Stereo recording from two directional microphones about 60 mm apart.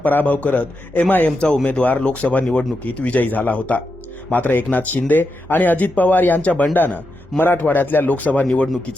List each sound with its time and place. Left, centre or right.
0.0 s a man's voice: left
8.4 s speech: centre